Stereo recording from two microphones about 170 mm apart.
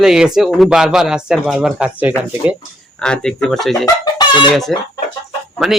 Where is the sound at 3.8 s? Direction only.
25° left (ahead or behind).